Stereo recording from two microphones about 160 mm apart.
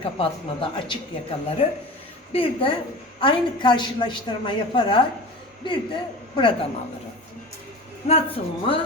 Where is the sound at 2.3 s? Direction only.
35° left (ahead or behind).